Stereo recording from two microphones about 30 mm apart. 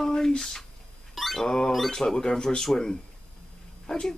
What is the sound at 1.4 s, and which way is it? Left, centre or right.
Speech, left.